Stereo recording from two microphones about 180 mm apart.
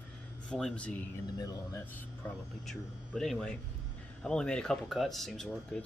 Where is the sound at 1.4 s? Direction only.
20° left (ahead or behind).